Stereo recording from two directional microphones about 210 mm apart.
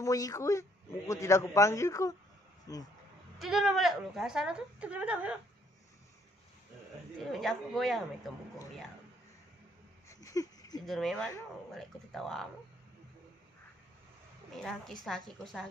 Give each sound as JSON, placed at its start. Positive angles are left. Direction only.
{"t": 0.0, "sound": "a man's voice", "side_deg": 15}
{"t": 3.3, "sound": "a woman's voice", "side_deg": 0}
{"t": 7.2, "sound": "a woman's voice", "side_deg": 0}
{"t": 10.0, "sound": "a sound", "side_deg": 15}
{"t": 10.9, "sound": "a woman's voice", "side_deg": 0}
{"t": 14.6, "sound": "a woman's voice", "side_deg": 0}